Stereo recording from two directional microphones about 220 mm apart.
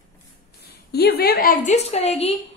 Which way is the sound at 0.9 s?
45° left (ahead or behind).